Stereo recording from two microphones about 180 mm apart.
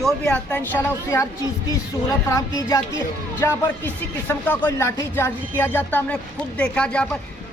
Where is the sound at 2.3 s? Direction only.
20° left (ahead or behind).